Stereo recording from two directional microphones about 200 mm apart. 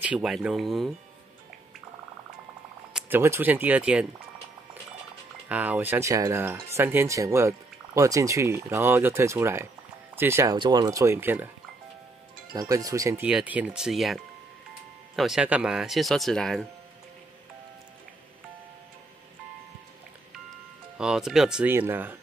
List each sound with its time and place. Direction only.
0.0 s speech: 5° right (ahead or behind)
2.9 s speech: 5° right (ahead or behind)
5.5 s speech: 10° right (ahead or behind)
12.5 s speech: 15° right (ahead or behind); by 16.6 s centre (ahead or behind)
21.0 s speech: 5° right (ahead or behind)